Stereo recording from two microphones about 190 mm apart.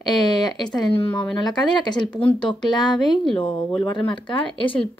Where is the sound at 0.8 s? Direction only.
5° left (ahead or behind).